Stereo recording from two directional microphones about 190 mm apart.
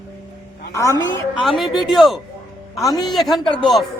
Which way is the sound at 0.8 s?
15° left (ahead or behind).